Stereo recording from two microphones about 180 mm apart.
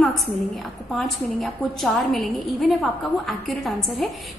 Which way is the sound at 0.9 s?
Centre (ahead or behind).